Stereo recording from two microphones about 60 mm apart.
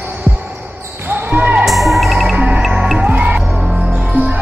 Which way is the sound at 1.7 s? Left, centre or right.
Centre.